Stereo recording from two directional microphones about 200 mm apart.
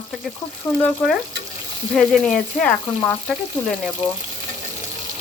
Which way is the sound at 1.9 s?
Centre (ahead or behind).